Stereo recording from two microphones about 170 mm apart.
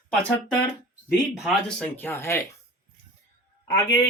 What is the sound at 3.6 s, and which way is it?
Speech, 15° left (ahead or behind).